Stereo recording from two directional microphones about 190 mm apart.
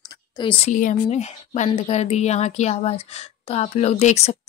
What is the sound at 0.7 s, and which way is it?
Speech, 40° left (ahead or behind).